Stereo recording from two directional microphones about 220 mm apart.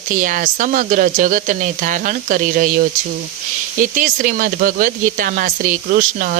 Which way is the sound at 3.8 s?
35° right (ahead or behind).